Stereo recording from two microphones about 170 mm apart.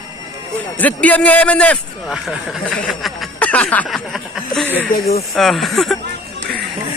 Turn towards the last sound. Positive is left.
turn(degrees=0)  # may be behind; listen again after turning